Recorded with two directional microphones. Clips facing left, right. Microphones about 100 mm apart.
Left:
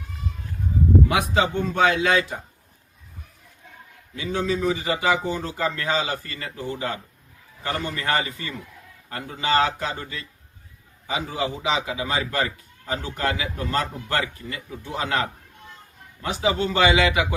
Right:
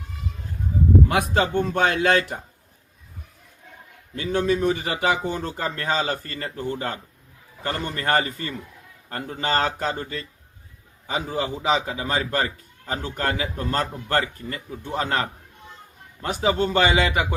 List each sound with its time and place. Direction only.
1.1 s speech: 50° right (ahead or behind)
4.1 s a man's voice: 50° right (ahead or behind)
16.2 s speech: 45° right (ahead or behind)